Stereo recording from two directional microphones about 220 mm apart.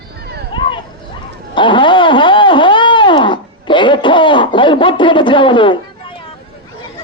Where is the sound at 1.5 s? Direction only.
20° left (ahead or behind).